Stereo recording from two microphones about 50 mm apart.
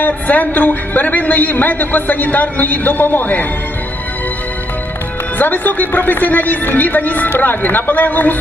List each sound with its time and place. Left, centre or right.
0.0 s a man's voice: left
5.4 s a man's voice: left